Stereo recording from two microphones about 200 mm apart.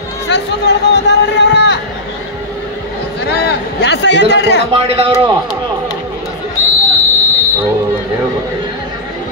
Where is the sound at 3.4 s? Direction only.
60° left (ahead or behind).